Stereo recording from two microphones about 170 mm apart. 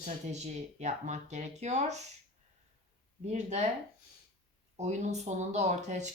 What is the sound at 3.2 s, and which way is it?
Speech, 40° right (ahead or behind).